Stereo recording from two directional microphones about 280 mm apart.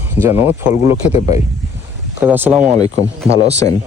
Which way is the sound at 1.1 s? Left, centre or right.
Left.